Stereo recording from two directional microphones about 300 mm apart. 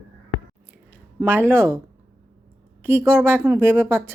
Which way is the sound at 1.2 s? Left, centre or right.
Centre.